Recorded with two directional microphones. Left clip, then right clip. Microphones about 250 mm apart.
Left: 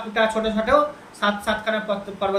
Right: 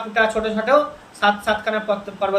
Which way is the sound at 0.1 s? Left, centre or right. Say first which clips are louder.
Right 2 dB; centre.